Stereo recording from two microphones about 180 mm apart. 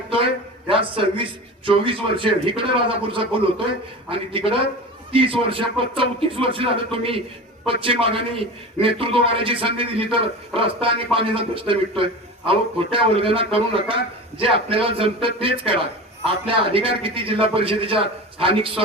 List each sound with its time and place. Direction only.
0.7 s a man's voice: 30° right (ahead or behind)